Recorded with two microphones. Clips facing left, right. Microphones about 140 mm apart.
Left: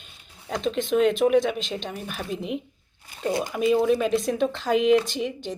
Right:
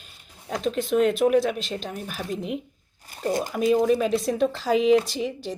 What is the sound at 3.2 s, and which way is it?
Speech, 35° right (ahead or behind).